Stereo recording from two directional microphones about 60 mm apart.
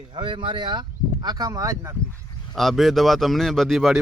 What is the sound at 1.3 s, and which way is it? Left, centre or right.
Speech, right.